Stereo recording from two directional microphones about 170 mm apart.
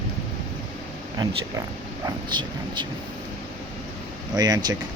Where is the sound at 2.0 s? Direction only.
25° right (ahead or behind).